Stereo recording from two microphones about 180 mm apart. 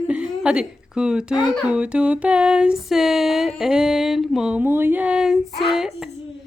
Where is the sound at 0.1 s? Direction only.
5° right (ahead or behind).